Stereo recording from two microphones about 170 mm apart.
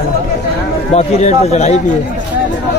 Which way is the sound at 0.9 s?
40° left (ahead or behind).